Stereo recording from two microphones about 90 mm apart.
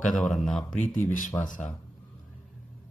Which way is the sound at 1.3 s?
30° left (ahead or behind).